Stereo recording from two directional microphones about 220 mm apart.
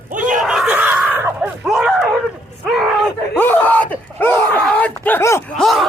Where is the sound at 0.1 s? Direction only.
35° right (ahead or behind).